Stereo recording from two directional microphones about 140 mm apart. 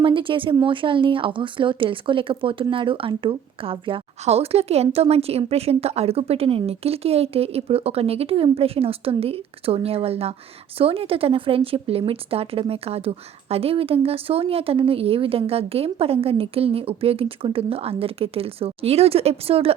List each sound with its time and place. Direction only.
0.0 s speech: 35° right (ahead or behind)